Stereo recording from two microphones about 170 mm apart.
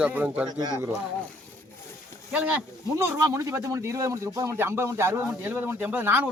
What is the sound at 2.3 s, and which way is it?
Speech, 10° right (ahead or behind).